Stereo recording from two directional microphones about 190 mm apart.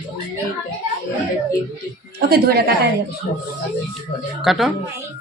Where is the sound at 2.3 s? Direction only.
55° right (ahead or behind).